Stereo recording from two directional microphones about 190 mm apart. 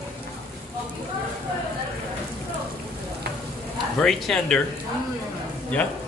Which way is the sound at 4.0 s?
Centre (ahead or behind).